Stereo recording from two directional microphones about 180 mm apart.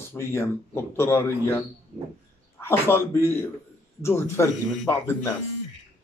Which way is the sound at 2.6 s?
15° left (ahead or behind).